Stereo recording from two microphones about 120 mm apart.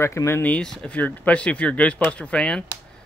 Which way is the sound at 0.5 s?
5° left (ahead or behind).